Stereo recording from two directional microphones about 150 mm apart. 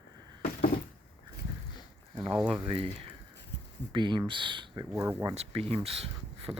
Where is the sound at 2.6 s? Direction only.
35° right (ahead or behind).